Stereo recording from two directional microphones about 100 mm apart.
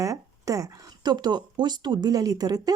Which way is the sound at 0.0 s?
35° right (ahead or behind).